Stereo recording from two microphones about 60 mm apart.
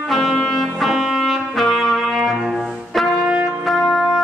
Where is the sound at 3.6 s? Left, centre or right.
Centre.